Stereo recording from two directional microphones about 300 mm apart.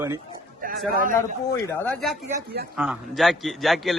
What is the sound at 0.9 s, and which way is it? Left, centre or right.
Speech, right.